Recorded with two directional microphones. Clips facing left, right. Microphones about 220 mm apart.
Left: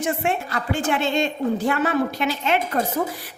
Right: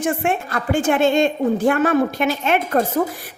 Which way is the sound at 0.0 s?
50° right (ahead or behind).